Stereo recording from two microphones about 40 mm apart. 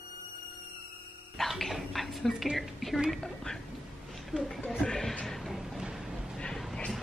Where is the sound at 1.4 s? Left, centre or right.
Centre.